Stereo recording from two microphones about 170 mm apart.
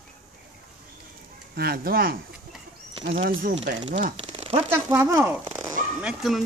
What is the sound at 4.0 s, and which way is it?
Speech, 40° right (ahead or behind).